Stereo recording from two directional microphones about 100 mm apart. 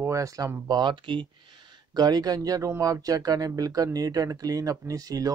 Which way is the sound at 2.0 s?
40° right (ahead or behind).